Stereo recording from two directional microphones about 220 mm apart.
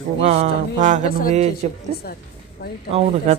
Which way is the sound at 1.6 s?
30° right (ahead or behind).